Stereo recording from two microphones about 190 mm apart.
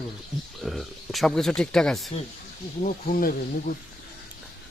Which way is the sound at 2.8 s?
45° left (ahead or behind).